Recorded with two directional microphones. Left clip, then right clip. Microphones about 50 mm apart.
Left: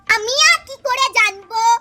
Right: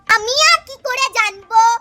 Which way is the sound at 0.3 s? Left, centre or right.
Right.